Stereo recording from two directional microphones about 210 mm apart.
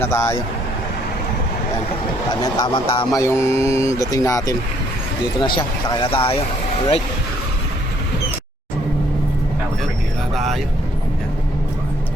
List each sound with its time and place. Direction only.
0.0 s speech: 10° left (ahead or behind)
2.6 s speech: 20° left (ahead or behind)
10.3 s vehicle: centre (ahead or behind)